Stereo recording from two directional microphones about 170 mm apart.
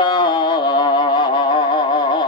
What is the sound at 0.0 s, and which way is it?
Music, 25° left (ahead or behind).